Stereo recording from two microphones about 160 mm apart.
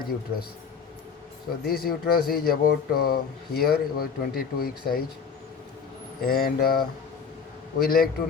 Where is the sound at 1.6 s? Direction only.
70° left (ahead or behind).